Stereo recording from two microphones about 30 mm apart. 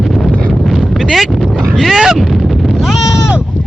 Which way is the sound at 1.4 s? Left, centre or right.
Centre.